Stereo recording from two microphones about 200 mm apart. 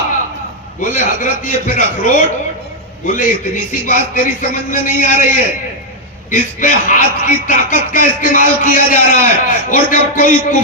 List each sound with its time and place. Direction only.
0.8 s a man's voice: 40° left (ahead or behind)